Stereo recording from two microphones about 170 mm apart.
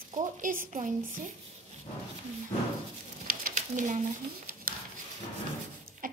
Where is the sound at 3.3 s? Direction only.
50° right (ahead or behind).